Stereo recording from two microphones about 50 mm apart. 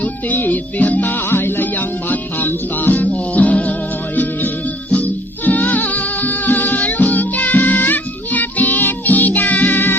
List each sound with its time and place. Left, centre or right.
0.0 s music: left